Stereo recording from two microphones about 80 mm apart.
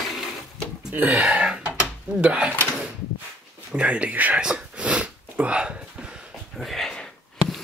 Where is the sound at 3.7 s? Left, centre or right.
Centre.